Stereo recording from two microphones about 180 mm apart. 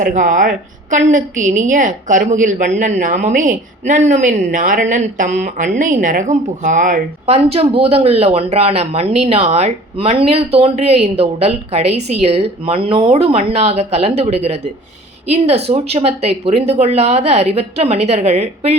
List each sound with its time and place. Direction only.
0.0 s a woman's voice: 45° right (ahead or behind)